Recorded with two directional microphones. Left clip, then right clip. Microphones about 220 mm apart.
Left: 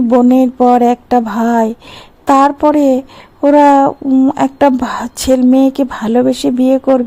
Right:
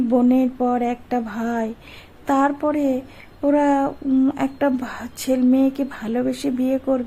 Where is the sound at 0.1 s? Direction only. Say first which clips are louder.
Left 9 dB; 30° left (ahead or behind).